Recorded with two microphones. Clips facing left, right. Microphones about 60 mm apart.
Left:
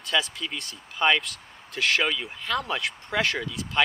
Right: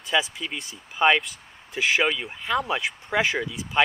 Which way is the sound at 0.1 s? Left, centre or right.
Centre.